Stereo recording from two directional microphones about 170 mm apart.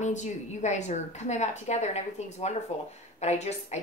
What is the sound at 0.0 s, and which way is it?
A woman's voice, 45° left (ahead or behind).